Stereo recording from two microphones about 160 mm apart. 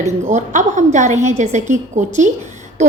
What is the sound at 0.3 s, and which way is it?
A woman's voice, 50° right (ahead or behind).